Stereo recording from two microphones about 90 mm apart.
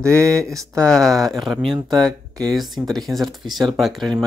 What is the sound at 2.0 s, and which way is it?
Speech, 45° right (ahead or behind).